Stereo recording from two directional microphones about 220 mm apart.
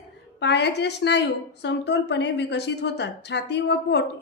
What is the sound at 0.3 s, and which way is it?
A woman's voice, 50° left (ahead or behind).